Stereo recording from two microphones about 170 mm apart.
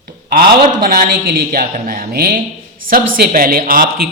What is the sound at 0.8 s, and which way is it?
A man's voice, 55° right (ahead or behind).